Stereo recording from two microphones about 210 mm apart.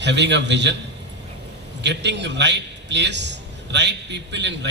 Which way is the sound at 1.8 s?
55° right (ahead or behind).